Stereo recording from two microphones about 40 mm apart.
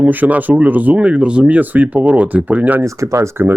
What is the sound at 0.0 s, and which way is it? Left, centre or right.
Speech, right.